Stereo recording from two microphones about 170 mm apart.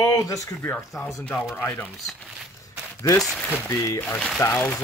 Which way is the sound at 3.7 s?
20° left (ahead or behind).